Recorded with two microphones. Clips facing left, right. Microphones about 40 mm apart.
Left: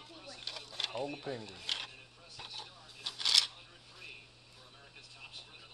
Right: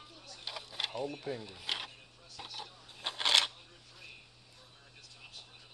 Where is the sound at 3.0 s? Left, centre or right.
Right.